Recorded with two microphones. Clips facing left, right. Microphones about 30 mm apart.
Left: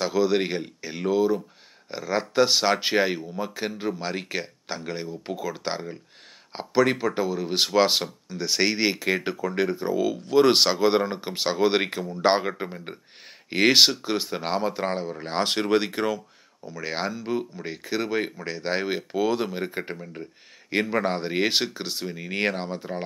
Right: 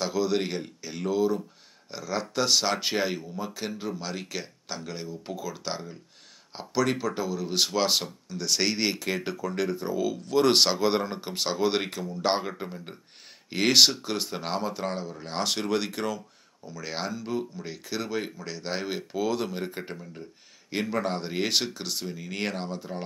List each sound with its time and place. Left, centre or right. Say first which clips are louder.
0.0 s speech: left 4 dB; centre